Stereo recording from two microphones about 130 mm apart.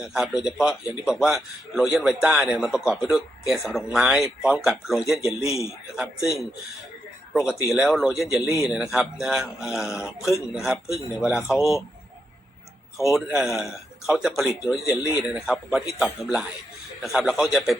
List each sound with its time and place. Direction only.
0.0 s a man's voice: 5° right (ahead or behind)
5.4 s a man's voice: 20° left (ahead or behind)
7.3 s a man's voice: 5° right (ahead or behind)
13.2 s a man's voice: 5° right (ahead or behind)